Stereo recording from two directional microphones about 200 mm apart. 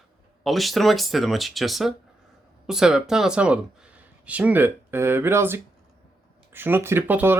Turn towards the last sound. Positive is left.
turn(degrees=-10)  # may be behind; listen again after turning